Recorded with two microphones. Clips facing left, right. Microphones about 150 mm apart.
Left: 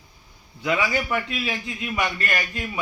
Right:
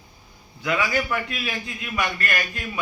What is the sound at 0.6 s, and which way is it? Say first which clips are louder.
A man's voice: even; 20° left (ahead or behind).